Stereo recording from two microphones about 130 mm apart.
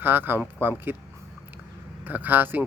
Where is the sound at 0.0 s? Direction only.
15° right (ahead or behind).